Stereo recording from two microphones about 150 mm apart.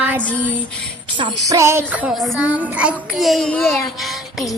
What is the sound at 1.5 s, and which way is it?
Child singing, 20° right (ahead or behind).